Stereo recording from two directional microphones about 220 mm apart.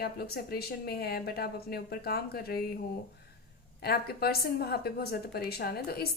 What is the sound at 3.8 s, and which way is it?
A woman's voice, 45° left (ahead or behind).